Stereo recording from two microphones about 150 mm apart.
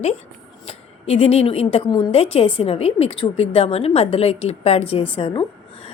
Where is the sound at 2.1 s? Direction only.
40° left (ahead or behind).